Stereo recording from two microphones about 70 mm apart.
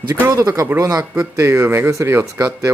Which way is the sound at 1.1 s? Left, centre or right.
Right.